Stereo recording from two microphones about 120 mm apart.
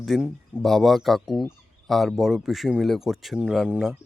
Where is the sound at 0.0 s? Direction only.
Centre (ahead or behind).